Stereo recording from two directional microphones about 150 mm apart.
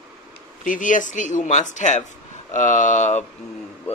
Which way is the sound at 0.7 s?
60° left (ahead or behind).